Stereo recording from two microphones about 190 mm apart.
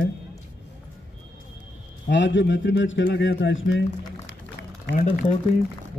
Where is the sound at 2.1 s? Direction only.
75° left (ahead or behind).